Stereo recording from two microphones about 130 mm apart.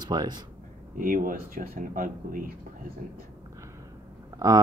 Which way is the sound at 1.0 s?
90° right.